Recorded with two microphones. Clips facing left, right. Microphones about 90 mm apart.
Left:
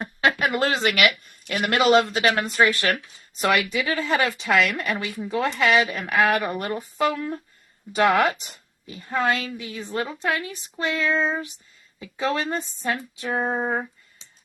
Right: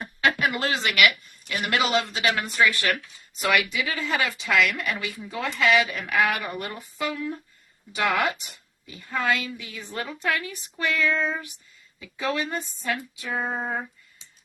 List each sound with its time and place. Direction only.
0.0 s a sound: 35° left (ahead or behind)
1.5 s speech: 45° left (ahead or behind)
2.6 s a woman's voice: 35° left (ahead or behind)